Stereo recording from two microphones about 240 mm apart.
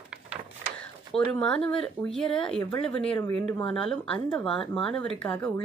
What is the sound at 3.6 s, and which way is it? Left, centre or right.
Speech, left.